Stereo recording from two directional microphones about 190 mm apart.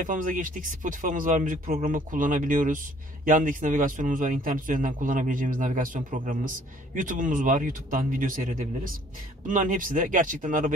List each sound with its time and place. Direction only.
0.0 s a man's voice: 45° right (ahead or behind)